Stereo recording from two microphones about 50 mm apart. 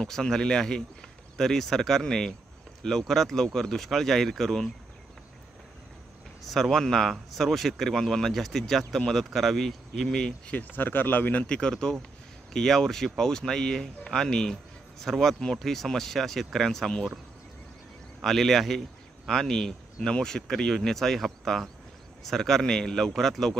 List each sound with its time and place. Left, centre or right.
0.0 s speech: centre
6.5 s speech: centre
10.4 s speech: left
11.4 s speech: centre
18.2 s speech: centre